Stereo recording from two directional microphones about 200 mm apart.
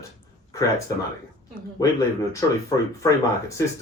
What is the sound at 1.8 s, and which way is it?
Speech, 20° left (ahead or behind).